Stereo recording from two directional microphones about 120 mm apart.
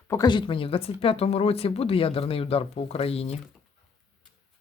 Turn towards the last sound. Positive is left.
turn(degrees=55)  # may be behind; listen again after turning